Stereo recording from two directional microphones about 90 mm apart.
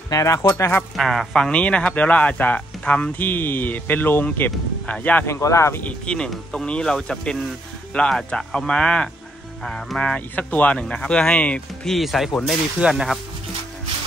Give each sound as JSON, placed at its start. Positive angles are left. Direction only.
{"t": 0.1, "sound": "speech", "side_deg": 35}
{"t": 0.6, "sound": "speech", "side_deg": 25}
{"t": 0.9, "sound": "speech", "side_deg": 5}
{"t": 5.2, "sound": "speech", "side_deg": 30}
{"t": 5.9, "sound": "speech", "side_deg": 10}
{"t": 11.9, "sound": "speech", "side_deg": 0}